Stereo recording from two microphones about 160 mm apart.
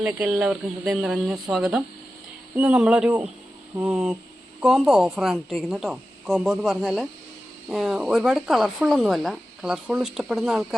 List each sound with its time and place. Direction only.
0.0 s speech: 5° right (ahead or behind)